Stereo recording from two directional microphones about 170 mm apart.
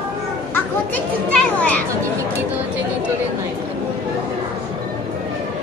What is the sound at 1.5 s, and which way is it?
Children playing, 10° left (ahead or behind).